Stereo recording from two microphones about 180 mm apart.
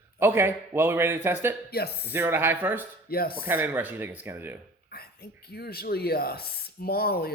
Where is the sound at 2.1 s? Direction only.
10° right (ahead or behind).